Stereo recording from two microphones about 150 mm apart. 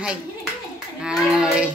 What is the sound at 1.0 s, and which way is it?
Child singing, 5° right (ahead or behind).